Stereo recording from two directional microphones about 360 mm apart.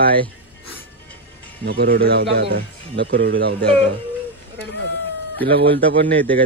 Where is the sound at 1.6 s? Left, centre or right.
Right.